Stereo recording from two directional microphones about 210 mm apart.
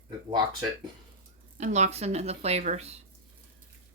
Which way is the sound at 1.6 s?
35° right (ahead or behind).